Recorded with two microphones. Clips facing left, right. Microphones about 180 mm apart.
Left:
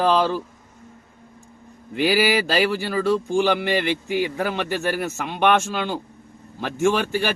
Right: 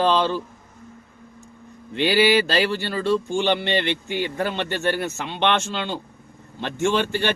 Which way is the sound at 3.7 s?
10° left (ahead or behind).